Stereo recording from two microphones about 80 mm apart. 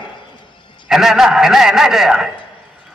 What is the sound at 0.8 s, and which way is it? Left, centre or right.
A man's voice, centre.